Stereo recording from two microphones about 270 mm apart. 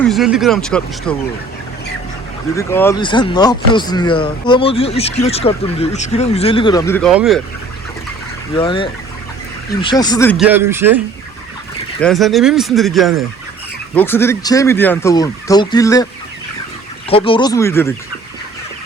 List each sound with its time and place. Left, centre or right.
0.1 s speech: centre
2.6 s speech: centre
7.1 s speech: centre
8.5 s speech: centre
10.3 s speech: centre
17.1 s speech: centre